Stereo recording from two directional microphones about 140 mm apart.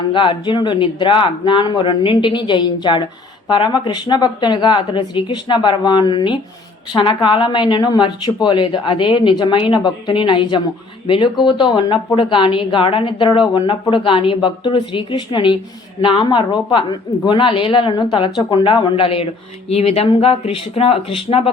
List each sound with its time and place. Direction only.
0.1 s a woman's voice: 35° left (ahead or behind)